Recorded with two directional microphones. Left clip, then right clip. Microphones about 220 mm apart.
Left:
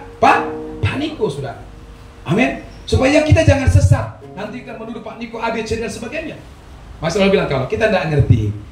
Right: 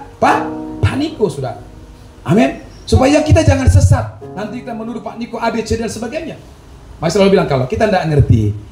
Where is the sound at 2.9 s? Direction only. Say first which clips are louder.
Right 2 dB; 35° right (ahead or behind).